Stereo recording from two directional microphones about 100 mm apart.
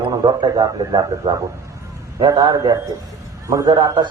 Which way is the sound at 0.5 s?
35° right (ahead or behind).